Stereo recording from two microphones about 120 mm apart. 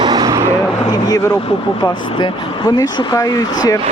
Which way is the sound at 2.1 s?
45° left (ahead or behind).